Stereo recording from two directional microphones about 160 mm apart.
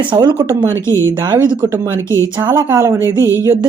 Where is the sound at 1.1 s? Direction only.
25° right (ahead or behind).